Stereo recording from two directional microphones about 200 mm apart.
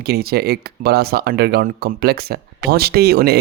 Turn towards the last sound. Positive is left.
turn(degrees=-55)  # may be behind; listen again after turning